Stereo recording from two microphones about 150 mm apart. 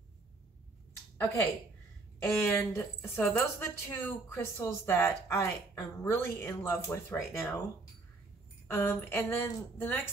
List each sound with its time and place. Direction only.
1.2 s speech: 20° left (ahead or behind)
8.6 s speech: 15° left (ahead or behind)